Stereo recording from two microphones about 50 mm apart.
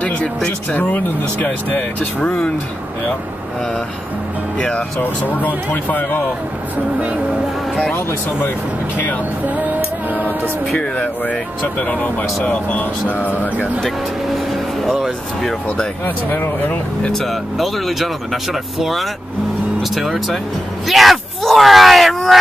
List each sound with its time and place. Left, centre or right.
0.0 s speech: left
0.7 s speech: left
5.0 s speech: left
8.9 s speech: left
10.8 s speech: left
14.5 s speech: centre
16.3 s speech: left
17.1 s speech: centre
20.8 s a sound: centre